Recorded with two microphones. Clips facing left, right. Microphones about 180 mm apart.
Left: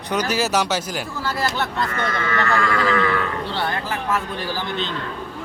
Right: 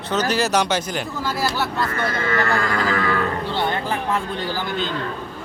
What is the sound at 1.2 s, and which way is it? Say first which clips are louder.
Speech: even; 10° right (ahead or behind).